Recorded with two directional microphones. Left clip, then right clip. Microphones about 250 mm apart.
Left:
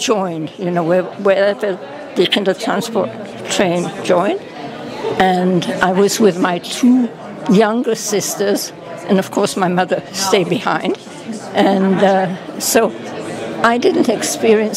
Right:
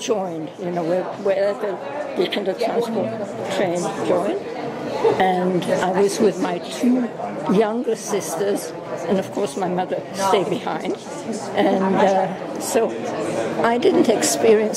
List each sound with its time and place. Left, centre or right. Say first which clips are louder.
0.0 s a woman's voice: left 6 dB; left
13.6 s a woman's voice: left 4 dB; left